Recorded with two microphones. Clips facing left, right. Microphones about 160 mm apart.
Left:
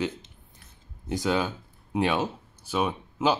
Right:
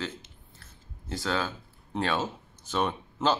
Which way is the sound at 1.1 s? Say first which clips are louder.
Left 4 dB; 15° left (ahead or behind).